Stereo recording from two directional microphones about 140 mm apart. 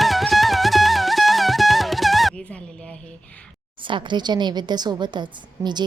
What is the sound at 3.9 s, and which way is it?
A woman's voice, 35° right (ahead or behind).